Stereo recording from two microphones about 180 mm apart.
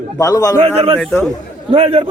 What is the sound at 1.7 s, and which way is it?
Speech, 35° right (ahead or behind).